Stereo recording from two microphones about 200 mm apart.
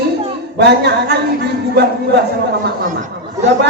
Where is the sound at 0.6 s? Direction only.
55° right (ahead or behind).